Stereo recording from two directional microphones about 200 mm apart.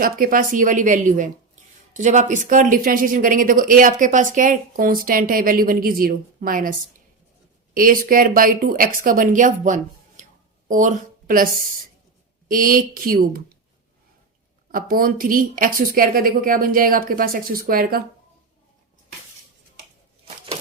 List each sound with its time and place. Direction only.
0.0 s a woman's voice: 45° right (ahead or behind)
12.5 s speech: 45° right (ahead or behind)
14.7 s speech: 45° right (ahead or behind)